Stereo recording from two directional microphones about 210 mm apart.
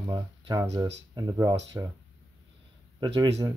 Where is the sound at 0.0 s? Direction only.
20° right (ahead or behind).